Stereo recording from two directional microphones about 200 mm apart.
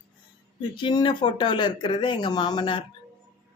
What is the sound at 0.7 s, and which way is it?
Speech, 25° left (ahead or behind).